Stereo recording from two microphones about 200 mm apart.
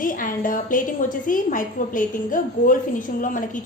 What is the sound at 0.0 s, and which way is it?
A woman's voice, 40° left (ahead or behind).